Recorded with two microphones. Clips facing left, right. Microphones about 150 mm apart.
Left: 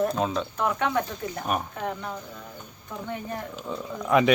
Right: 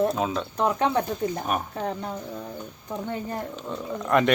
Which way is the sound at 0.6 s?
30° right (ahead or behind).